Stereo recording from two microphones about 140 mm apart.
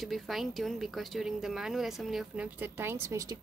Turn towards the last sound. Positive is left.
turn(degrees=-20)  # may be behind; listen again after turning